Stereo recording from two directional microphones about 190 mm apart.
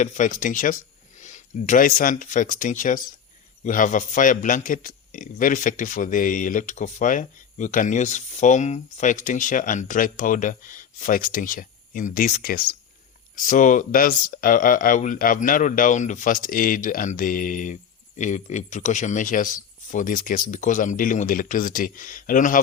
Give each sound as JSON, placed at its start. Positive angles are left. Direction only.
{"t": 0.0, "sound": "a man's voice", "side_deg": 40}